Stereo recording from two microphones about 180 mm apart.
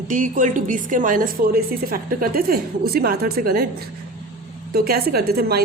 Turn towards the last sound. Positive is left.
turn(degrees=-60)  # may be behind; listen again after turning